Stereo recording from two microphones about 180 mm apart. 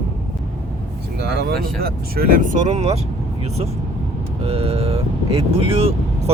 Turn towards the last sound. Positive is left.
turn(degrees=-30)  # may be behind; listen again after turning